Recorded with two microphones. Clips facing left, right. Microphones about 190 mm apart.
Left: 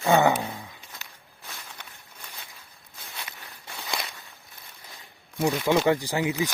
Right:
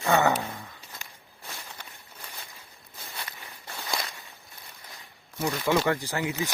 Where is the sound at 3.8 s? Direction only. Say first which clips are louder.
Even; 5° left (ahead or behind).